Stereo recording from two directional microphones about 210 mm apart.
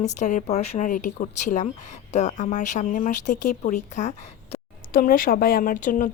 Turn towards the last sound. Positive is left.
turn(degrees=40)  # may be behind; listen again after turning